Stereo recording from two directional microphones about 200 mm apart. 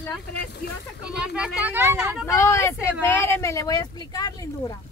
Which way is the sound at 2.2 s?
15° left (ahead or behind).